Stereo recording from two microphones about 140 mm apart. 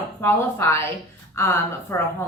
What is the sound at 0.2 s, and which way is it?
A woman's voice, 15° left (ahead or behind).